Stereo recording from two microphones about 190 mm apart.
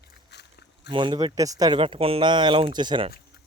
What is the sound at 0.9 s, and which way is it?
Speech, 25° right (ahead or behind).